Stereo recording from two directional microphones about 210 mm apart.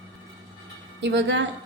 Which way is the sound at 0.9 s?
60° right (ahead or behind).